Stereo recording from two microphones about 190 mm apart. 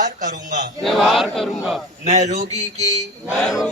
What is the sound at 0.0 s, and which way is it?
Speech, 40° right (ahead or behind).